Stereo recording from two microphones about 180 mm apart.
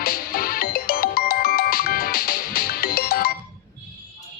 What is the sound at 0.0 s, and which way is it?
Music, 55° left (ahead or behind).